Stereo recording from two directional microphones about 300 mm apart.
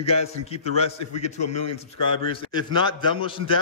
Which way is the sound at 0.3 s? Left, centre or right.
Centre.